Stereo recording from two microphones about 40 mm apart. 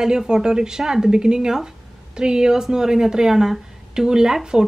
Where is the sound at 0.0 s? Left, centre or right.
Centre.